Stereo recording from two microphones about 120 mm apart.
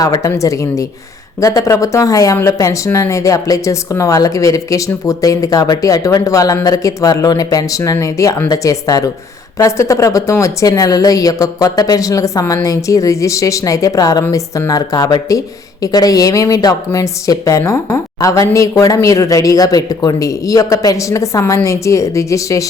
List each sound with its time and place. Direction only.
0.0 s speech: 30° left (ahead or behind)